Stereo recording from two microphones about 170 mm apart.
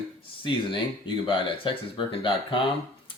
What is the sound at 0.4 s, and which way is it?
Speech, 30° left (ahead or behind).